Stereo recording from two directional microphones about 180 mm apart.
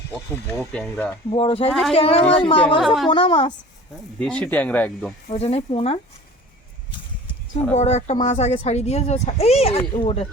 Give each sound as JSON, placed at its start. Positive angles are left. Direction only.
{"t": 0.1, "sound": "speech", "side_deg": 10}
{"t": 1.3, "sound": "speech", "side_deg": 30}
{"t": 2.8, "sound": "a woman's voice", "side_deg": 0}
{"t": 3.1, "sound": "speech", "side_deg": 30}
{"t": 4.2, "sound": "speech", "side_deg": 5}
{"t": 5.3, "sound": "speech", "side_deg": 35}
{"t": 7.8, "sound": "speech", "side_deg": 40}